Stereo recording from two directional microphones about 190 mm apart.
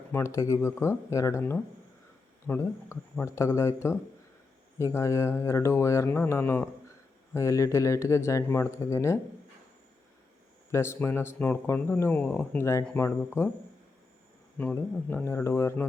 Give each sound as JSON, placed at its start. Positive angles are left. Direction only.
{"t": 0.1, "sound": "speech", "side_deg": 15}
{"t": 10.7, "sound": "speech", "side_deg": 15}
{"t": 14.6, "sound": "speech", "side_deg": 10}